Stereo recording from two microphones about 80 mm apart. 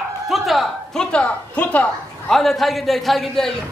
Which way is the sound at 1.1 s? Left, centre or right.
Centre.